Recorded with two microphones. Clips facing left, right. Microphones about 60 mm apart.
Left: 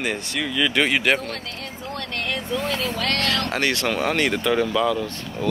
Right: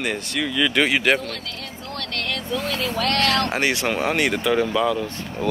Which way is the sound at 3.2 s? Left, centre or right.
Right.